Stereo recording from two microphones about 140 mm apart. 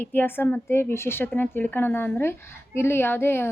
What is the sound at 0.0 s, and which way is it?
A woman's voice, 15° left (ahead or behind).